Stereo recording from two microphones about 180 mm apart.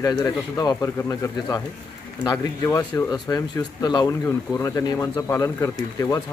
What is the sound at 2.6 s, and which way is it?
Speech, 20° left (ahead or behind).